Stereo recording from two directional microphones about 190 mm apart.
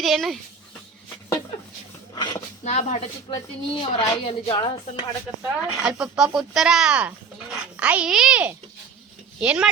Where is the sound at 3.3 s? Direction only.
30° left (ahead or behind).